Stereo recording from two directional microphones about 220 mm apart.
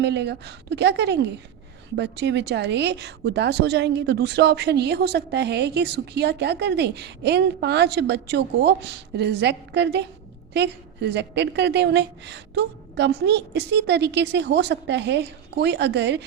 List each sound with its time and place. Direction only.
0.0 s a woman's voice: 50° right (ahead or behind)